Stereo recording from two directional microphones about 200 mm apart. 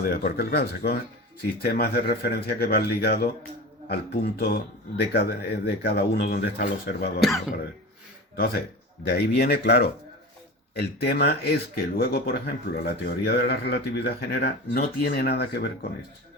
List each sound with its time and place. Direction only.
0.0 s speech: 45° left (ahead or behind)
7.2 s speech: centre (ahead or behind)
9.0 s speech: 55° left (ahead or behind)